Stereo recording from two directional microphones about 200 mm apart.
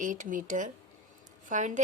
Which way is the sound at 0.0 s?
40° right (ahead or behind).